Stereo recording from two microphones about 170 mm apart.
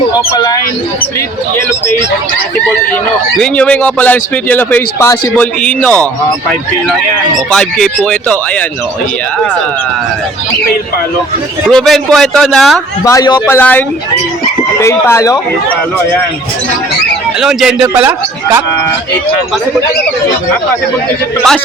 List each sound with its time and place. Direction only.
0.3 s a man's voice: 20° left (ahead or behind)
3.3 s speech: 5° left (ahead or behind)
7.5 s a man's voice: 5° left (ahead or behind)
11.7 s a man's voice: 5° left (ahead or behind)
13.1 s a man's voice: 20° left (ahead or behind)
13.6 s speech: 10° left (ahead or behind)
17.4 s a man's voice: centre (ahead or behind)